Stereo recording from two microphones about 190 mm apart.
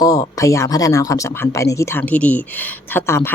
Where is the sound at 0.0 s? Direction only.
20° left (ahead or behind).